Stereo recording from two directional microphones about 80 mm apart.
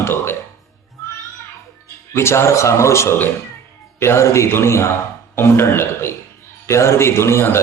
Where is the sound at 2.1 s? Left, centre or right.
Left.